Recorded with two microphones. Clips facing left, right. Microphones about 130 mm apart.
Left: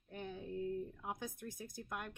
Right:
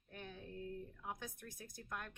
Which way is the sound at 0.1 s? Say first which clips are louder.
Left 6 dB; 20° left (ahead or behind).